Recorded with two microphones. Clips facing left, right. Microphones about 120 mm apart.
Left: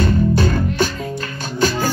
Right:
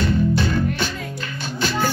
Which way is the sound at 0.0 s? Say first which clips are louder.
Left 3 dB; 45° left (ahead or behind).